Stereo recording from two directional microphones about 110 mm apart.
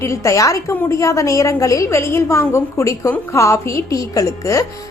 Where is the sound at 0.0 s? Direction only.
25° left (ahead or behind).